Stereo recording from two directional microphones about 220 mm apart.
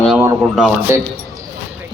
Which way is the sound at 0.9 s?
10° right (ahead or behind).